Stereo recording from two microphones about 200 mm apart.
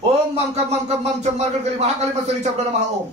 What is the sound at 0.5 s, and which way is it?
Speech, 35° right (ahead or behind).